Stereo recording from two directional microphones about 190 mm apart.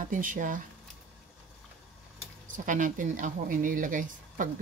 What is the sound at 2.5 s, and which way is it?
Speech, 45° right (ahead or behind).